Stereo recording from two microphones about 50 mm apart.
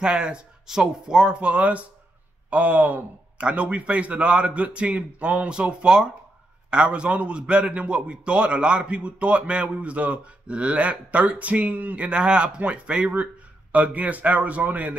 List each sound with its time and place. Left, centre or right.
0.0 s a man's voice: centre; by 15.0 s right